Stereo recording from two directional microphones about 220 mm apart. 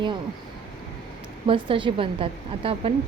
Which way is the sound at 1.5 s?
25° right (ahead or behind).